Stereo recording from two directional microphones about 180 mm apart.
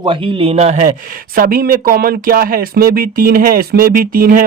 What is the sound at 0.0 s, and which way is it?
Speech, 30° right (ahead or behind).